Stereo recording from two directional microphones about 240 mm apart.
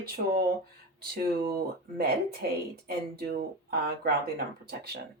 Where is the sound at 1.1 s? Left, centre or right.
Right.